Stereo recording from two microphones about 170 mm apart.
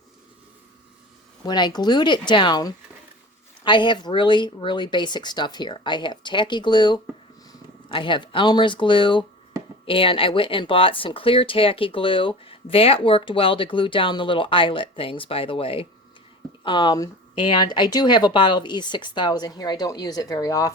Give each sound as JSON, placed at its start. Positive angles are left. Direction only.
{"t": 1.5, "sound": "speech", "side_deg": 25}